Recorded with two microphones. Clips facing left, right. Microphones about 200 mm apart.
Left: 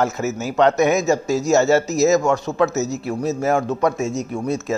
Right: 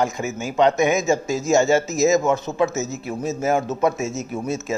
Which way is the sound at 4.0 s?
Centre (ahead or behind).